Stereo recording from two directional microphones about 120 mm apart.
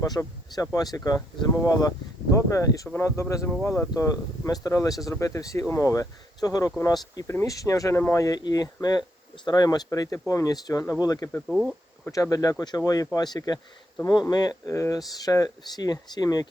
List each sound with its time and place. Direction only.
0.0 s speech: 30° left (ahead or behind)
11.4 s speech: 5° right (ahead or behind)
12.1 s speech: 30° left (ahead or behind)